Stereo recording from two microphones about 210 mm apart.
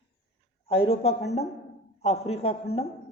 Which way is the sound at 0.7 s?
25° left (ahead or behind).